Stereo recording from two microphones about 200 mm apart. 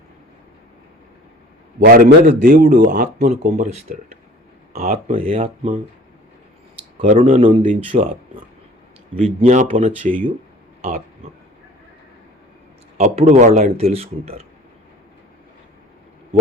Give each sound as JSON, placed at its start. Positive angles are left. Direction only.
{"t": 1.8, "sound": "speech", "side_deg": -50}
{"t": 4.7, "sound": "speech", "side_deg": -45}
{"t": 7.0, "sound": "speech", "side_deg": -35}
{"t": 9.2, "sound": "speech", "side_deg": -35}
{"t": 13.0, "sound": "speech", "side_deg": -35}